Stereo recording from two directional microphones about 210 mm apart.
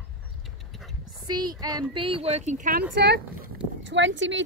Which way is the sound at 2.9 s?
55° right (ahead or behind).